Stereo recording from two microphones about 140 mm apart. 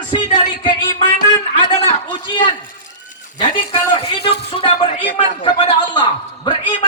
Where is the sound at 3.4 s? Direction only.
35° left (ahead or behind).